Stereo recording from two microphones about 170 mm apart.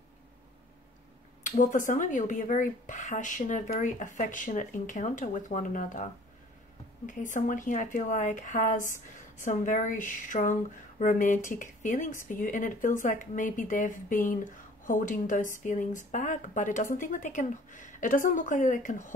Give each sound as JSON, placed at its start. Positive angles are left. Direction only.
{"t": 1.4, "sound": "speech", "side_deg": 50}
{"t": 7.1, "sound": "speech", "side_deg": 50}